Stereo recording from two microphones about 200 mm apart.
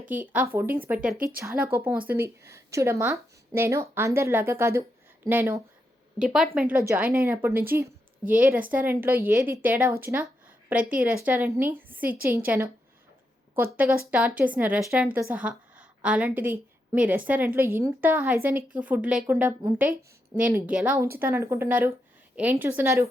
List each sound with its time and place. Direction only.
0.1 s a woman's voice: 10° right (ahead or behind)
12.0 s a woman's voice: 45° right (ahead or behind)
12.5 s speech: 15° right (ahead or behind)